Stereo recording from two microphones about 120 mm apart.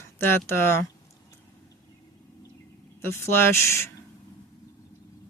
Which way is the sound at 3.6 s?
25° left (ahead or behind).